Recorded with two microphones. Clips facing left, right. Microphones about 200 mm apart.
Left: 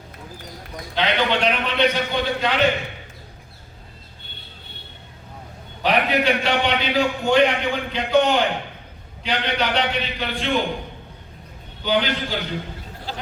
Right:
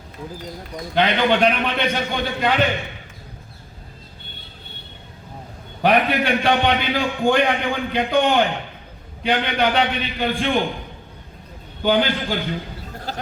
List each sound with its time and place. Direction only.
0.9 s a man's voice: 50° right (ahead or behind)
5.8 s a man's voice: 50° right (ahead or behind)
11.8 s a man's voice: 50° right (ahead or behind)